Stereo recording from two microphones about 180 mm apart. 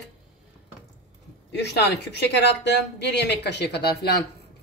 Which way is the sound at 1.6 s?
70° left (ahead or behind).